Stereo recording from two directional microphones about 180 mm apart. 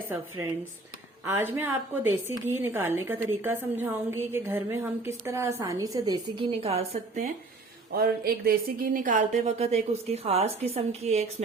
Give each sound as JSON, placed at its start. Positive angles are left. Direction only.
{"t": 0.4, "sound": "a woman's voice", "side_deg": -10}
{"t": 7.9, "sound": "a woman's voice", "side_deg": -55}